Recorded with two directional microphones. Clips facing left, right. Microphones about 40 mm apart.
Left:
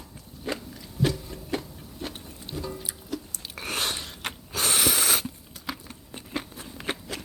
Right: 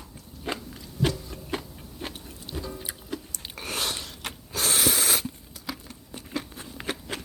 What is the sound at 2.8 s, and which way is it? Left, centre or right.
Tick-tock, right.